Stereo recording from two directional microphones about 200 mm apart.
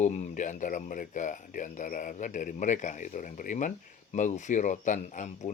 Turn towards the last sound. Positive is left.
turn(degrees=35)  # may be behind; listen again after turning